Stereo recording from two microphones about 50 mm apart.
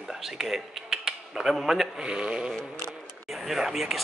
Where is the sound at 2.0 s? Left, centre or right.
Right.